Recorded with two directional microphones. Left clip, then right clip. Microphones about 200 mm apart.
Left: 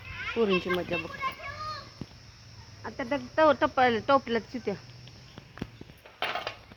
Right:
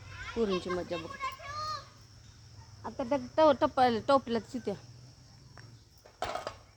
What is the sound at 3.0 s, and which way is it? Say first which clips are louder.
Speech: left 2 dB; 5° right (ahead or behind).